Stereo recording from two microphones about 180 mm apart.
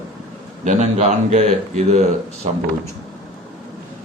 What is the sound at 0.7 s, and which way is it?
Speech, 40° right (ahead or behind).